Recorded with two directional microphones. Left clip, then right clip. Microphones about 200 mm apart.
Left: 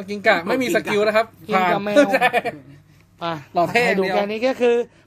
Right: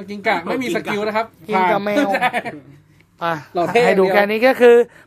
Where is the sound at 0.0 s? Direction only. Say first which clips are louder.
Left 2 dB; 40° left (ahead or behind).